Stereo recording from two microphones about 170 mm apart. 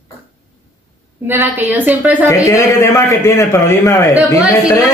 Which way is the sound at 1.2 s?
15° right (ahead or behind).